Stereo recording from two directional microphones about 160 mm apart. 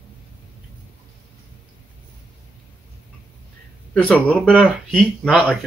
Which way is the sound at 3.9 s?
5° left (ahead or behind).